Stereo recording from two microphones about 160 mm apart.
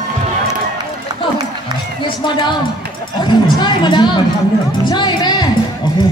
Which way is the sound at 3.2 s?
25° left (ahead or behind).